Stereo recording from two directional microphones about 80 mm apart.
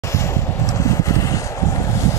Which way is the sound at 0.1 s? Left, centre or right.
Left.